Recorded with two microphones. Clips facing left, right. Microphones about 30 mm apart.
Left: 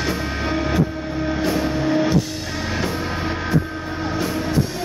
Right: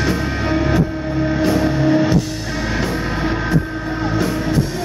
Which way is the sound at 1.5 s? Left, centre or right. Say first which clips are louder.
Right 4 dB; centre.